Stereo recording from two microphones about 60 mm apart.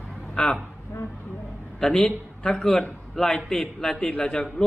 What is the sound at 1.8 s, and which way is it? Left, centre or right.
A man's voice, centre.